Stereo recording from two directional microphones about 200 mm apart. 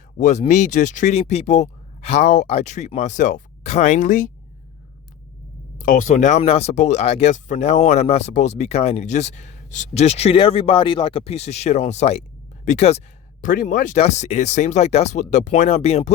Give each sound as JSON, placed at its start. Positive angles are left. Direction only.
{"t": 0.2, "sound": "speech", "side_deg": 35}
{"t": 5.7, "sound": "speech", "side_deg": 40}